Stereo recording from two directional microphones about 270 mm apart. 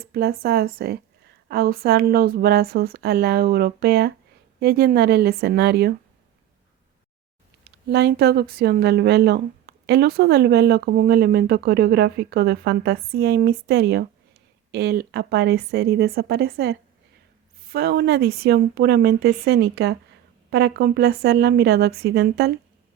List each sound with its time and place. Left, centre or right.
0.0 s speech: right
7.6 s speech: right